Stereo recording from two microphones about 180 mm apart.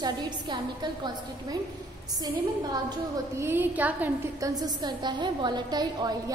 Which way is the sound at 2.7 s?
20° right (ahead or behind).